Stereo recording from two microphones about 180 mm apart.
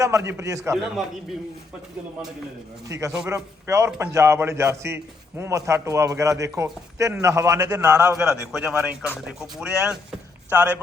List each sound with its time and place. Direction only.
0.0 s a man's voice: 15° right (ahead or behind)
2.9 s a man's voice: 15° right (ahead or behind)
8.2 s speech: 5° right (ahead or behind)